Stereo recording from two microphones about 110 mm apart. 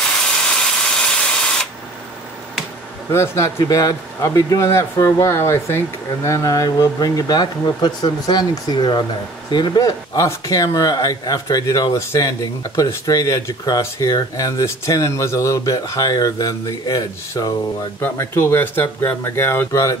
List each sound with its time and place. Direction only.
0.6 s printer: 5° left (ahead or behind)
3.1 s speech: 25° left (ahead or behind)
18.0 s speech: 20° left (ahead or behind)